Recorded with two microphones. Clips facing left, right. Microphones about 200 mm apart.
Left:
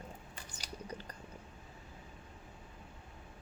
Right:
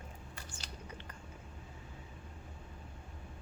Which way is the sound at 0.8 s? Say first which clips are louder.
Left 4 dB; 40° left (ahead or behind).